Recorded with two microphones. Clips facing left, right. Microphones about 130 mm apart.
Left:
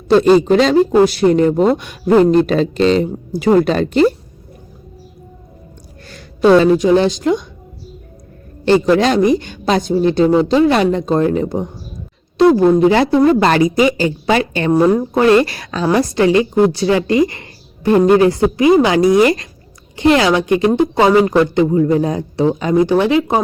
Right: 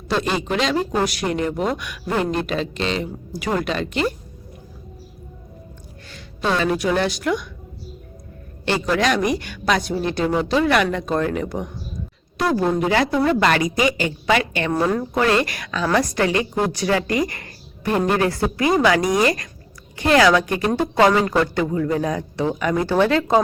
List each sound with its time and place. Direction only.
0.1 s speech: 35° left (ahead or behind)
6.1 s a sound: 40° left (ahead or behind)
6.7 s a woman's voice: 25° left (ahead or behind)
8.6 s a woman's voice: 30° left (ahead or behind)